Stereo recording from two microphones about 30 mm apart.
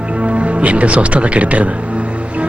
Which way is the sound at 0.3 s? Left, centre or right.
Right.